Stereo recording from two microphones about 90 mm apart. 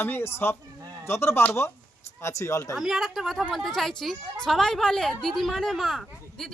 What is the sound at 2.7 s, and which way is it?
Speech, 5° right (ahead or behind).